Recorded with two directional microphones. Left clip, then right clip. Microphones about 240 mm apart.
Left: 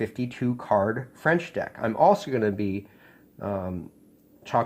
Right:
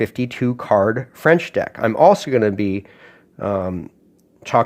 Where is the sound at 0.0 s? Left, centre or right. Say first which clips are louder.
Right 8 dB; right.